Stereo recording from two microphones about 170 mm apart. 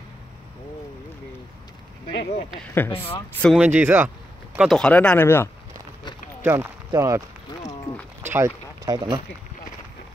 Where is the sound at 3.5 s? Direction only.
10° right (ahead or behind).